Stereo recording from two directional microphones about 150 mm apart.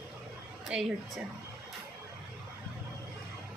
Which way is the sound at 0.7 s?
5° right (ahead or behind).